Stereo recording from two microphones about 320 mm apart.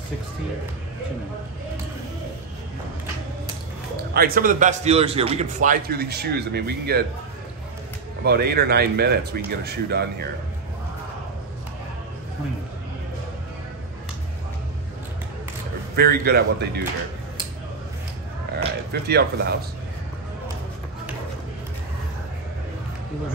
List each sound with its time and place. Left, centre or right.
3.9 s a man's voice: right
8.2 s speech: right
16.0 s a man's voice: right
18.9 s speech: right